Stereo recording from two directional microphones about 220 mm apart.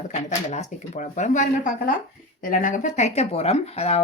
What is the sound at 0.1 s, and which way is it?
Speech, 30° left (ahead or behind).